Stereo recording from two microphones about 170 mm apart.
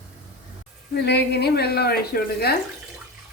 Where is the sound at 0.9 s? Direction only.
80° left.